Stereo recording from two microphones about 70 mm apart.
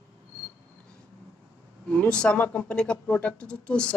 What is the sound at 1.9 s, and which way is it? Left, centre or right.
Speech, centre.